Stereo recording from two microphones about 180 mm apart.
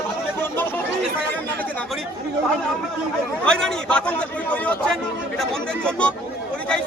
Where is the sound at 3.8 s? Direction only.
5° left (ahead or behind).